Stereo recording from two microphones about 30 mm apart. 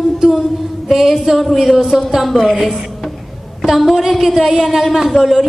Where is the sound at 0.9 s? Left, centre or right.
Centre.